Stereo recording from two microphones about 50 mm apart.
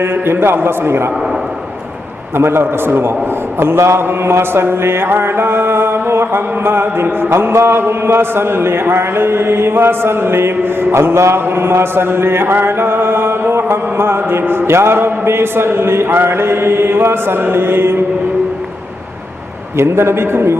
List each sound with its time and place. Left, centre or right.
0.0 s mantra: right
2.3 s mantra: right
3.6 s a man's voice: right
4.0 s mantra: right
19.7 s a man's voice: right